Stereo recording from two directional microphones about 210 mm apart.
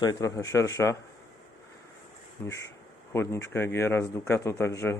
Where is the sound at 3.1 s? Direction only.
10° left (ahead or behind).